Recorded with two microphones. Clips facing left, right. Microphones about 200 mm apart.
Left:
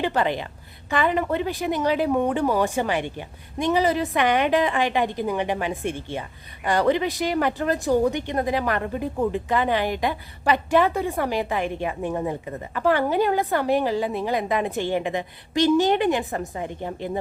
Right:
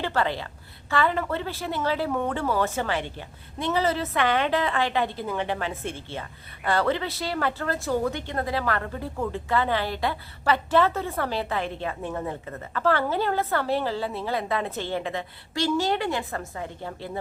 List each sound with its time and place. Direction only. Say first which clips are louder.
0.0 s a woman's voice: left 3 dB; 15° left (ahead or behind)